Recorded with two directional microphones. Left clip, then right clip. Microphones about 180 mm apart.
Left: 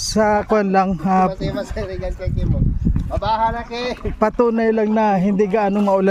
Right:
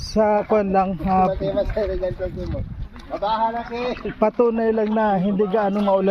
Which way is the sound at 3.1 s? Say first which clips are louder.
Left 2 dB; 50° left (ahead or behind).